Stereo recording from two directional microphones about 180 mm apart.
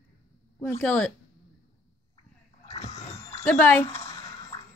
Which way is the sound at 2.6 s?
35° left (ahead or behind).